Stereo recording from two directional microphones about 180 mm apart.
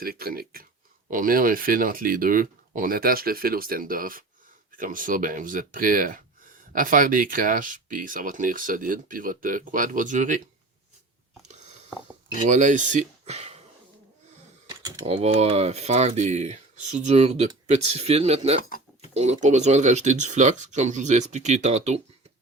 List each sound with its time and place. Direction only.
0.0 s speech: 55° right (ahead or behind)
12.4 s speech: 45° right (ahead or behind)
14.7 s typing: 20° right (ahead or behind)
15.0 s speech: 35° right (ahead or behind)